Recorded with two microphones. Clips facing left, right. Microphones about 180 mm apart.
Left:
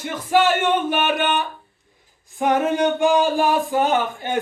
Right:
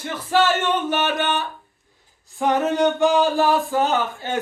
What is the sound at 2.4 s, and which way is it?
Speech, 20° left (ahead or behind).